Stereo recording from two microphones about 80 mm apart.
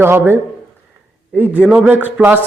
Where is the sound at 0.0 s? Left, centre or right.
Right.